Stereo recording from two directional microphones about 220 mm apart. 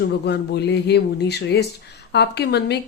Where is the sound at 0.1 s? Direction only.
50° left (ahead or behind).